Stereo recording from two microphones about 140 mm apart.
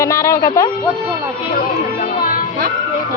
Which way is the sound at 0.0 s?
20° left (ahead or behind).